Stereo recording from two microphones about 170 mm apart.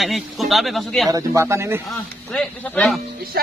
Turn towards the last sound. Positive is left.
turn(degrees=-65)  # may be behind; listen again after turning